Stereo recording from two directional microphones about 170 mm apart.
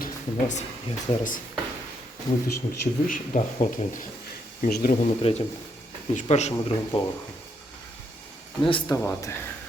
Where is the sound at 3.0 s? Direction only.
50° left (ahead or behind).